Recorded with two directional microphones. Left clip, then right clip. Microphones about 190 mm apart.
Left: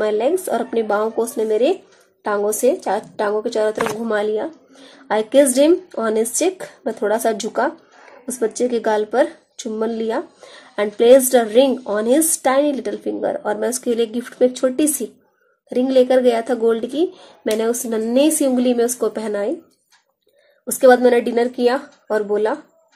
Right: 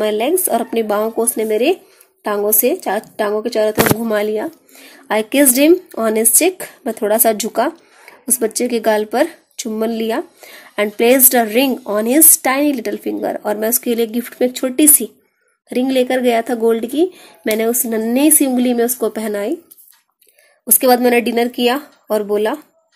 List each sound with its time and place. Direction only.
0.1 s a woman's voice: 30° right (ahead or behind)
20.6 s a woman's voice: 30° right (ahead or behind)